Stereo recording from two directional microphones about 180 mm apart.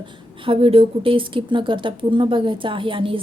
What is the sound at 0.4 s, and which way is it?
A woman's voice, 30° right (ahead or behind).